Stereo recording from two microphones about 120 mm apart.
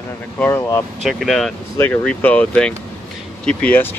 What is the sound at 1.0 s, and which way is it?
Speech, centre (ahead or behind).